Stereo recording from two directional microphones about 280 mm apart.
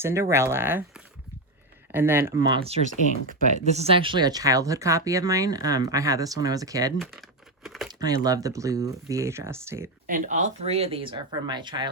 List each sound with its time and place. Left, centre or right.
0.0 s speech: centre
3.2 s speech: right; by 6.9 s centre
7.0 s crumpling: centre
7.9 s speech: centre
10.1 s speech: right